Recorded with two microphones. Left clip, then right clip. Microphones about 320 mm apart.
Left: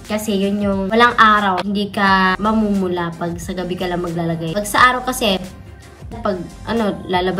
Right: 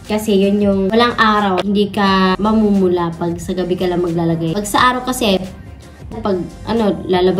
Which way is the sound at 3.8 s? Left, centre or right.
Right.